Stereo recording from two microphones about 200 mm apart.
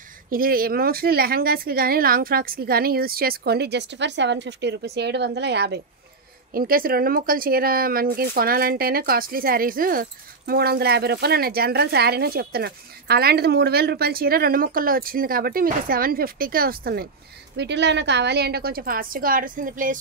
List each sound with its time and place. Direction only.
0.3 s speech: 45° right (ahead or behind)
6.5 s speech: 45° right (ahead or behind)
17.6 s speech: 60° right (ahead or behind); by 20.0 s 40° right (ahead or behind)